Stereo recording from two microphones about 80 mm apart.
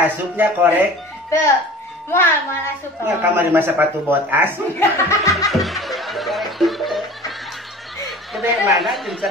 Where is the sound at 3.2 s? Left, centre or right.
Right.